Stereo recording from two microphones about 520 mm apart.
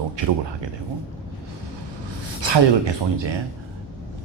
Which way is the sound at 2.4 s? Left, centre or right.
Right.